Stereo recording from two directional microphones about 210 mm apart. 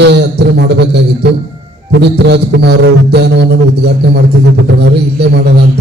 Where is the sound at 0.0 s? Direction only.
55° right (ahead or behind).